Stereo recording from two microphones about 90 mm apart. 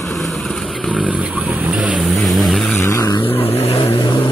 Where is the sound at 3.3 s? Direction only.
85° left; by 4.2 s 70° left (ahead or behind).